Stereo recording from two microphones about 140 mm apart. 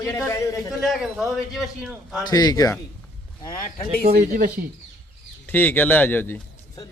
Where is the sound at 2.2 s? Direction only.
30° left (ahead or behind).